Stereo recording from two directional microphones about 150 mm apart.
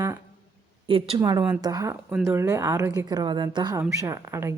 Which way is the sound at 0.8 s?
35° right (ahead or behind).